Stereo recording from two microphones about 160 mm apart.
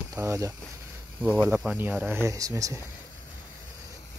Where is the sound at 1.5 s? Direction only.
10° right (ahead or behind).